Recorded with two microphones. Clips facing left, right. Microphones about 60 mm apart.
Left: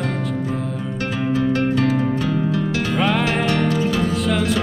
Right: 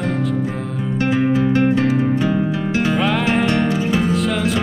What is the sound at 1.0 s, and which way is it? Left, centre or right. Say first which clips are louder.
Music: right 5 dB; right.